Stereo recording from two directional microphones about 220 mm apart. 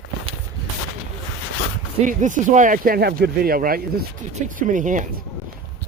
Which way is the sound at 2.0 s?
35° right (ahead or behind).